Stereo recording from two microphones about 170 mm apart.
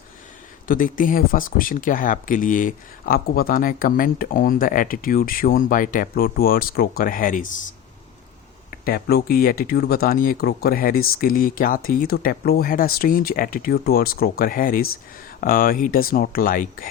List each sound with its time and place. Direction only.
0.7 s speech: 55° left (ahead or behind)
8.7 s speech: 60° left (ahead or behind)